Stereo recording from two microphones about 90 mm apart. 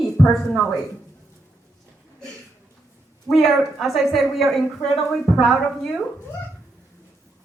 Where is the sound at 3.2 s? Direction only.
Centre (ahead or behind).